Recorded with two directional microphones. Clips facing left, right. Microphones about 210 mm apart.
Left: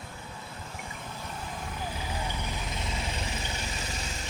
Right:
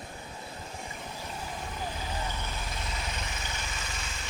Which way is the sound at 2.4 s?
15° left (ahead or behind).